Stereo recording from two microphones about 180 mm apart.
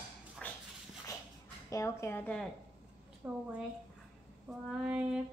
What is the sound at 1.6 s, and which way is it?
Speech, 15° left (ahead or behind).